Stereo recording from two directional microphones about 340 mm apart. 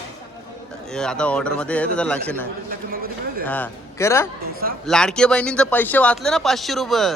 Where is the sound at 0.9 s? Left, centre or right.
Centre.